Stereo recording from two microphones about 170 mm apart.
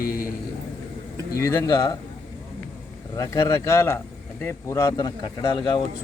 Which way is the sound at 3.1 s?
20° left (ahead or behind).